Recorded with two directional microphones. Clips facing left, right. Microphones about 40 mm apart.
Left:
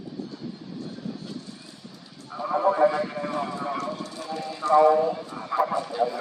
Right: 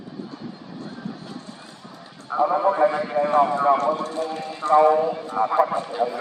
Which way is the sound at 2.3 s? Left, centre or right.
Right.